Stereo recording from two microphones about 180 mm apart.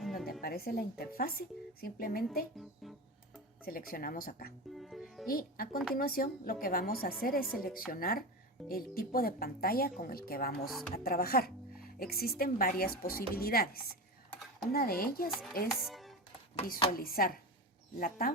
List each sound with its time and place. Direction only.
0.0 s music: centre (ahead or behind)
0.4 s a woman's voice: 55° left (ahead or behind)
2.8 s music: centre (ahead or behind)
3.7 s speech: 55° left (ahead or behind)
4.7 s music: centre (ahead or behind)
5.3 s a woman's voice: 55° left (ahead or behind)
15.8 s music: centre (ahead or behind)
17.0 s a woman's voice: 55° left (ahead or behind)